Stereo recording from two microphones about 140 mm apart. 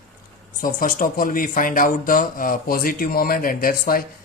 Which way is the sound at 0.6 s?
80° left.